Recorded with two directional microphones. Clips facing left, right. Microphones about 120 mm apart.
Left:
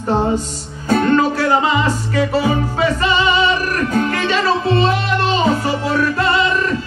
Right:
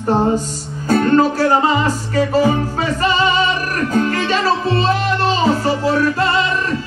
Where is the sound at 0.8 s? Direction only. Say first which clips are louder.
Right 1 dB; 40° right (ahead or behind).